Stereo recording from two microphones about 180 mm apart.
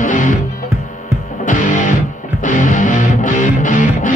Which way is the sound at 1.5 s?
45° left (ahead or behind).